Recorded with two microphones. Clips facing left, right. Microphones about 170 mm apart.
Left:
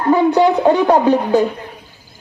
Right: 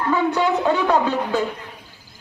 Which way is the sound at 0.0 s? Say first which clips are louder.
Left 7 dB; 35° left (ahead or behind).